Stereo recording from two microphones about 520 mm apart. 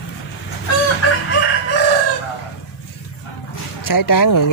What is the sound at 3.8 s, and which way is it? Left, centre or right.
Speech, left.